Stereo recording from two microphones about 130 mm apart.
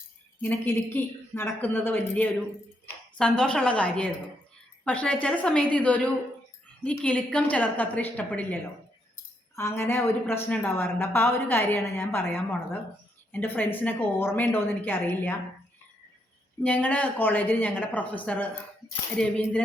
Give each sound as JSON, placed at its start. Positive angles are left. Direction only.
{"t": 0.4, "sound": "a woman's voice", "side_deg": 15}
{"t": 9.6, "sound": "a woman's voice", "side_deg": 20}
{"t": 16.6, "sound": "a woman's voice", "side_deg": 10}
{"t": 19.2, "sound": "tambourine", "side_deg": 5}